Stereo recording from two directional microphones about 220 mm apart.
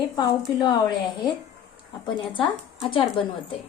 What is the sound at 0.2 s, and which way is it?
A woman's voice, 20° left (ahead or behind).